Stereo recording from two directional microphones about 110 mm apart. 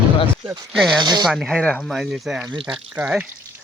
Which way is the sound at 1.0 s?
40° right (ahead or behind).